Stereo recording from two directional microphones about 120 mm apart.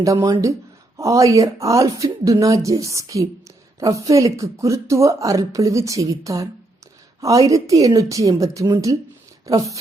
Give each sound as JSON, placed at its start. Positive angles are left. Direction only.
{"t": 0.0, "sound": "speech", "side_deg": -25}